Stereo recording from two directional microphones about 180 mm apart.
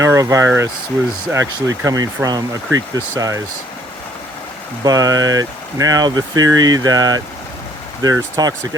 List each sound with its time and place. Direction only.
0.0 s speech: 15° right (ahead or behind)
4.8 s speech: 20° right (ahead or behind)